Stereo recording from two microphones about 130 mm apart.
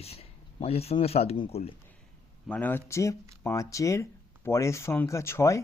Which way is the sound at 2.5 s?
15° left (ahead or behind).